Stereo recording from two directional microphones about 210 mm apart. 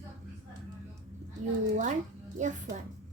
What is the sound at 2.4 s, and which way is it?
Speech, 35° right (ahead or behind).